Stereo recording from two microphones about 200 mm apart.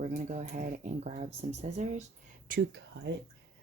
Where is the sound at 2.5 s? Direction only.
55° right (ahead or behind).